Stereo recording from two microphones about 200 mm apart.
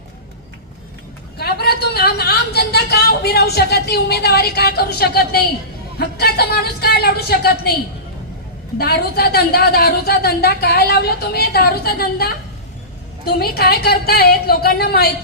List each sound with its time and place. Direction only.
1.4 s a woman's voice: 50° left (ahead or behind)
8.8 s a woman's voice: 50° left (ahead or behind)
13.4 s a woman's voice: 50° left (ahead or behind)